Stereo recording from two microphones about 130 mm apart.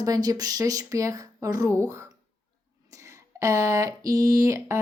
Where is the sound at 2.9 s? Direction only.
25° right (ahead or behind).